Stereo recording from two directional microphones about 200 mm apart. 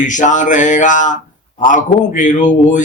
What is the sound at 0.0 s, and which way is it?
Speech, 40° left (ahead or behind).